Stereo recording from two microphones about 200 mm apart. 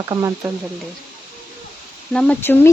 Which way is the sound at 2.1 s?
5° left (ahead or behind).